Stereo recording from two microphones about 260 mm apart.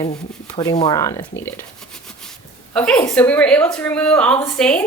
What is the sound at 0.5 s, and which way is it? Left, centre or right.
Speech, centre.